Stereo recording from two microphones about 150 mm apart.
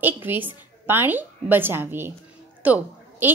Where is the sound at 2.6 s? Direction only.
10° right (ahead or behind).